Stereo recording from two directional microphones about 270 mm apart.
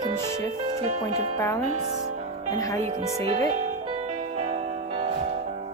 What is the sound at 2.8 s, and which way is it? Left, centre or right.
Speech, right.